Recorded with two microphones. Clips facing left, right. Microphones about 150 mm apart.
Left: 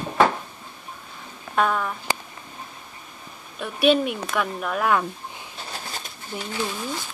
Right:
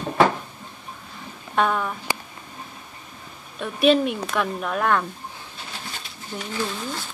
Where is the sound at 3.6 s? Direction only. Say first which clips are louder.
Right 1 dB; centre (ahead or behind).